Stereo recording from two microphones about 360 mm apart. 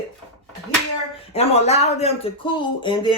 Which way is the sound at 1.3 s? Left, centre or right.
Centre.